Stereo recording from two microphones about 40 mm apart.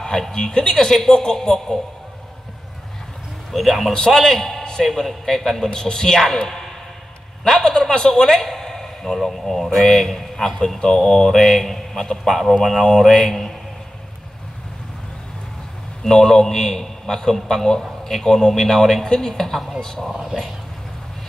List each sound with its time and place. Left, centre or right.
0.0 s a man's voice: centre
3.5 s a man's voice: centre
5.7 s a man's voice: centre
16.0 s a man's voice: centre
19.0 s a man's voice: centre
19.3 s a man's voice: centre
20.3 s speech: centre